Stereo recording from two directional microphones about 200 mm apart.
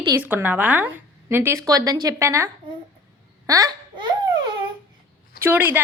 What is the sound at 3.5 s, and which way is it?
Babbling, 20° right (ahead or behind).